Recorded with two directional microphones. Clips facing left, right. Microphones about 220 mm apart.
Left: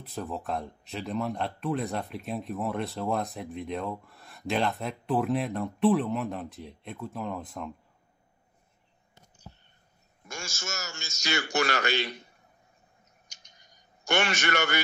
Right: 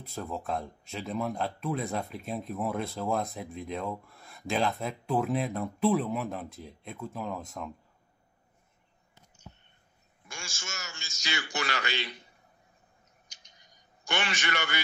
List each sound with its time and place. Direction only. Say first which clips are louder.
0.0 s speech: left 1 dB; centre (ahead or behind)
10.2 s a man's voice: left 5 dB; 40° left (ahead or behind)
13.3 s a sound: left 1 dB; 45° left (ahead or behind)
14.0 s a man's voice: left 5 dB; 45° left (ahead or behind)